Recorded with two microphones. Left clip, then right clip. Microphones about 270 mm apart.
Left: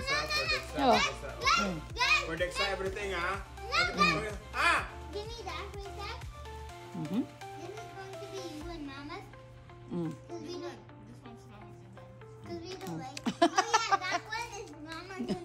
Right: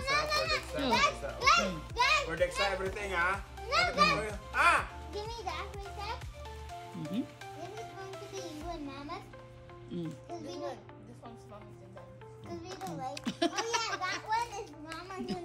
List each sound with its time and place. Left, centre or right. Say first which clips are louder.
0.0 s a child's voice: right 1 dB; centre
9.9 s speech: left 2 dB; centre
12.4 s a sound: even; centre
14.3 s children playing: right 5 dB; centre